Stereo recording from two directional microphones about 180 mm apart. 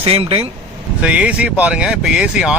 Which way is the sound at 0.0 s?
30° right (ahead or behind).